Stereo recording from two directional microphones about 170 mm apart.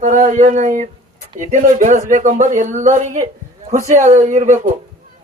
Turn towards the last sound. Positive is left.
turn(degrees=-45)  # may be behind; listen again after turning